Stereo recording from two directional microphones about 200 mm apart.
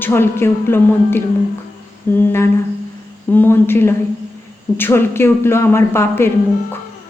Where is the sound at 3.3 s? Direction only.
10° left (ahead or behind).